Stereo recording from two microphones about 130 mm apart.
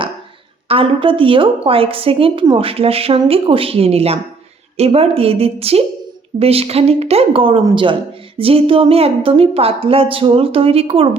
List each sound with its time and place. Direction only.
0.7 s a woman's voice: 45° right (ahead or behind)